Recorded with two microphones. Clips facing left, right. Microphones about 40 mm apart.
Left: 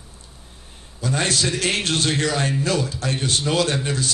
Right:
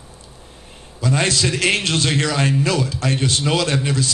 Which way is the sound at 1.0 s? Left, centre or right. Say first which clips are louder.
Right 4 dB; right.